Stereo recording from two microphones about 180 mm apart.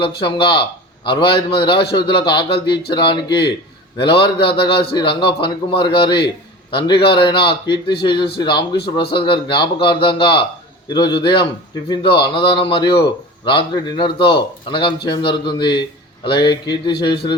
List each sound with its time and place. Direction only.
0.2 s a man's voice: 25° left (ahead or behind)